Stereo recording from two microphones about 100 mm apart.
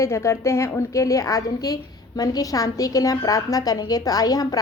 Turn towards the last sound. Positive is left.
turn(degrees=40)  # may be behind; listen again after turning